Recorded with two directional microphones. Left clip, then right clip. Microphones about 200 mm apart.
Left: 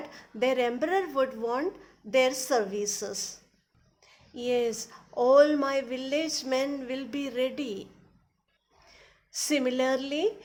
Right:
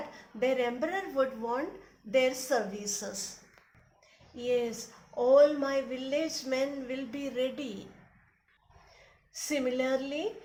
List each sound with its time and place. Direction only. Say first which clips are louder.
0.1 s speech: left 3 dB; 50° left (ahead or behind)
9.3 s speech: left 4 dB; 55° left (ahead or behind)